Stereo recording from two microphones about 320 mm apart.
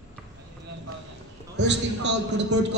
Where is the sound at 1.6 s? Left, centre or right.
Right.